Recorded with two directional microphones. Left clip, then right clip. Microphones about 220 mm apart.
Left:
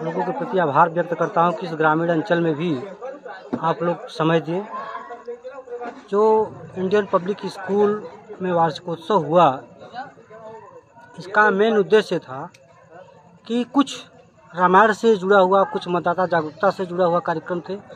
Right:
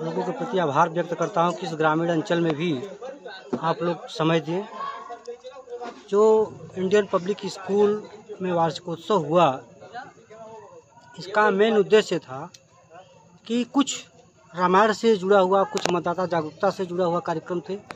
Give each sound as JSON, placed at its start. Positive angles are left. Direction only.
{"t": 0.5, "sound": "a man's voice", "side_deg": 0}
{"t": 6.0, "sound": "a man's voice", "side_deg": 0}
{"t": 9.9, "sound": "a sound", "side_deg": 55}
{"t": 11.3, "sound": "a man's voice", "side_deg": 5}
{"t": 13.5, "sound": "a man's voice", "side_deg": 0}